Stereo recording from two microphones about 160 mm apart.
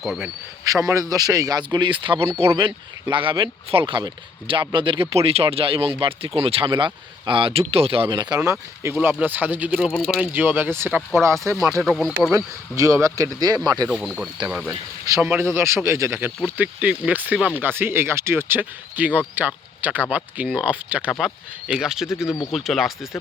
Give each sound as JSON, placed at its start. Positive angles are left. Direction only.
{"t": 0.0, "sound": "speech", "side_deg": 0}
{"t": 0.9, "sound": "speech", "side_deg": -20}
{"t": 8.4, "sound": "speech", "side_deg": -15}
{"t": 10.3, "sound": "speech", "side_deg": -10}
{"t": 11.8, "sound": "speech", "side_deg": 0}
{"t": 12.7, "sound": "speech", "side_deg": -20}
{"t": 13.8, "sound": "speech", "side_deg": 0}
{"t": 14.7, "sound": "speech", "side_deg": -20}